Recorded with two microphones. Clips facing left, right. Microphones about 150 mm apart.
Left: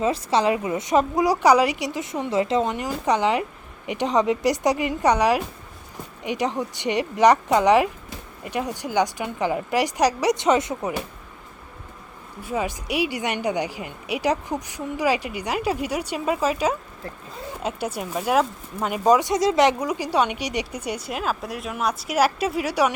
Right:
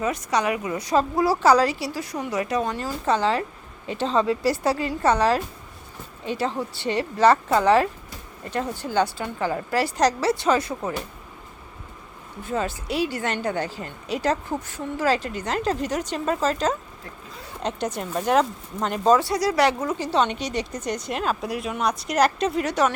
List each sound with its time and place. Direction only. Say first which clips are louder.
0.0 s a woman's voice: left 3 dB; 30° left (ahead or behind)
12.4 s speech: even; 10° left (ahead or behind)